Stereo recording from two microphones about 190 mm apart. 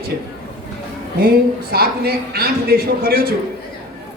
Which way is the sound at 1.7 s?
55° right (ahead or behind).